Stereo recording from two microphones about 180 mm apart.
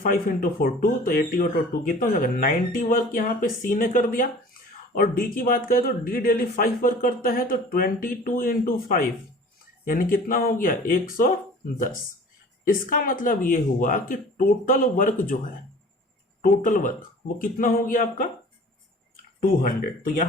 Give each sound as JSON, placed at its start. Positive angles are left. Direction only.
{"t": 0.0, "sound": "speech", "side_deg": 50}
{"t": 12.6, "sound": "speech", "side_deg": 50}
{"t": 16.6, "sound": "speech", "side_deg": 45}